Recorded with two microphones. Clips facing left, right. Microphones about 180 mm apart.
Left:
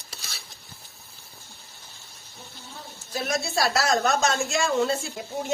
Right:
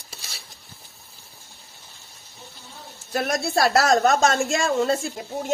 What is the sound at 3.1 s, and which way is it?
Speech, 60° right (ahead or behind).